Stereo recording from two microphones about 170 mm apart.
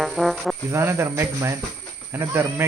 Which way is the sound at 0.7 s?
15° right (ahead or behind).